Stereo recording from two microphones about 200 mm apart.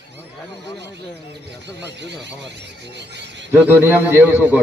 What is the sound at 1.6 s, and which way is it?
Speech, 60° right (ahead or behind).